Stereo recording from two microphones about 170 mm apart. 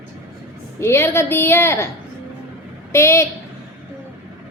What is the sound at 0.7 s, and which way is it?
A woman's voice, 15° left (ahead or behind).